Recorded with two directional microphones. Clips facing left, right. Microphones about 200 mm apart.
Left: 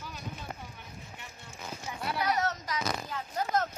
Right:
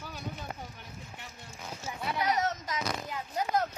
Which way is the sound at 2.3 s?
20° right (ahead or behind).